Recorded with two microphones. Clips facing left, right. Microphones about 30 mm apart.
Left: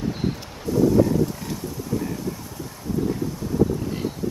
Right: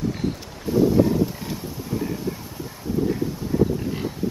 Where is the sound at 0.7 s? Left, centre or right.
Right.